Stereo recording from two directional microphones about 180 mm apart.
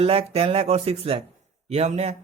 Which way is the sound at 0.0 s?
35° right (ahead or behind).